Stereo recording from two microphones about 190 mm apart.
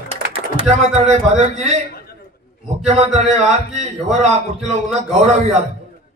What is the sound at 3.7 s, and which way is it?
A man's voice, 35° right (ahead or behind).